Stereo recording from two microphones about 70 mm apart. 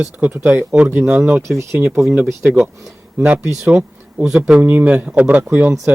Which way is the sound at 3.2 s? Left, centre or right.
Right.